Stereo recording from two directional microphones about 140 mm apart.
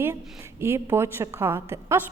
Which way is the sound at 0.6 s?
15° right (ahead or behind).